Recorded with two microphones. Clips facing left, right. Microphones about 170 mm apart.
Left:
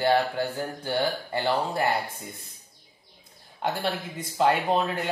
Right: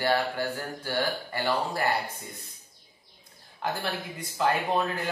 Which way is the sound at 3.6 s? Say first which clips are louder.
Left 3 dB; 20° left (ahead or behind).